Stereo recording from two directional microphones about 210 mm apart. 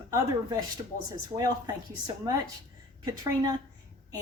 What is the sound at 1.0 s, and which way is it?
Speech, 15° right (ahead or behind).